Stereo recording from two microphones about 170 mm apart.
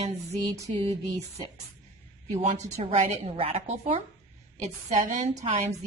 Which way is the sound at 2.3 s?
40° right (ahead or behind).